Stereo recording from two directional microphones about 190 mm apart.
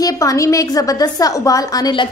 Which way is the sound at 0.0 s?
15° left (ahead or behind).